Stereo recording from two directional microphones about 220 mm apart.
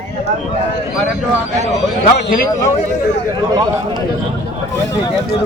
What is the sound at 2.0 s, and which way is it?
Speech, 40° left (ahead or behind).